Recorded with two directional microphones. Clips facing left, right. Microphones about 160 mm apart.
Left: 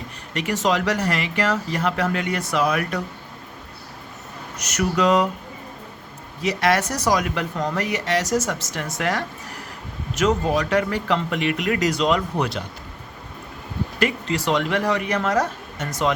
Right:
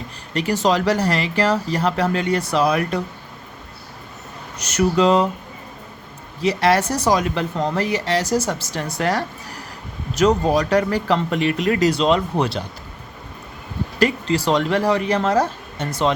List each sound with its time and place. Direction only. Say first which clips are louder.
0.3 s speech: right 3 dB; 35° right (ahead or behind)
4.5 s speech: right 5 dB; 30° right (ahead or behind)
6.4 s speech: right 3 dB; 30° right (ahead or behind)
14.0 s speech: right 4 dB; 35° right (ahead or behind)